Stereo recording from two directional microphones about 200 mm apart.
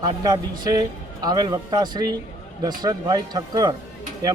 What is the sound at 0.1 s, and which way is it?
Speech, 20° right (ahead or behind).